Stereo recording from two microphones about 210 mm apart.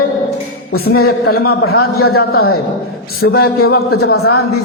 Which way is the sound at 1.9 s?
90° left.